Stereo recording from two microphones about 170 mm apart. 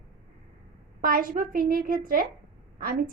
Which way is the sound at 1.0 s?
55° right (ahead or behind).